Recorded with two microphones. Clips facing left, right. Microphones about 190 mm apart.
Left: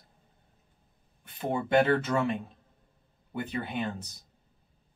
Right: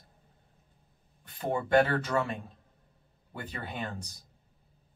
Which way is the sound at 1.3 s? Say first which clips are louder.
Even; 20° left (ahead or behind).